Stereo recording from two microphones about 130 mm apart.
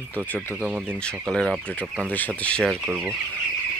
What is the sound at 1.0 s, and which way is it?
Speech, 5° left (ahead or behind).